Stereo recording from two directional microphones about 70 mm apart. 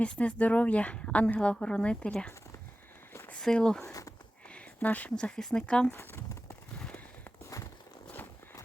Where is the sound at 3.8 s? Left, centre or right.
Left.